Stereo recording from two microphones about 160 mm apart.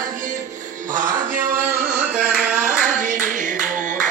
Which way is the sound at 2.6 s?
60° right (ahead or behind).